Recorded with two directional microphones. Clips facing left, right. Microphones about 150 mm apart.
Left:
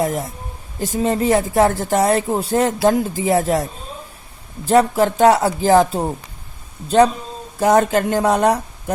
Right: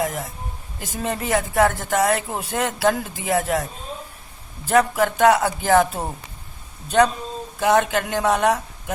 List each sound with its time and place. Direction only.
0.0 s speech: 30° left (ahead or behind)